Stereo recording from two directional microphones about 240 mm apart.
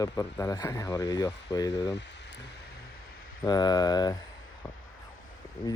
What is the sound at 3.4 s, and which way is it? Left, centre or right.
Speech, centre.